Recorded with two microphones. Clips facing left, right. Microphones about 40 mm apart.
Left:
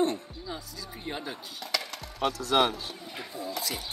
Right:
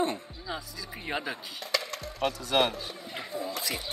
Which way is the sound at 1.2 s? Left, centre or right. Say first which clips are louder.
Right 2 dB; right.